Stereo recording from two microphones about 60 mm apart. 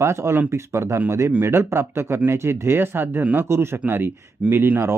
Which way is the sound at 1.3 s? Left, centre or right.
Right.